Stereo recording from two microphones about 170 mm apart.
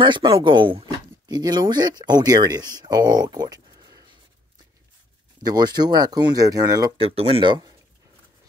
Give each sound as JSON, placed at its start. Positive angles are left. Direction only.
{"t": 0.0, "sound": "speech", "side_deg": -25}
{"t": 5.4, "sound": "speech", "side_deg": -25}
{"t": 7.0, "sound": "speech", "side_deg": -35}